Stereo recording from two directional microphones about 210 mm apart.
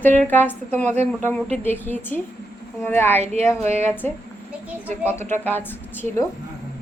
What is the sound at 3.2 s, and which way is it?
Speech, 30° right (ahead or behind).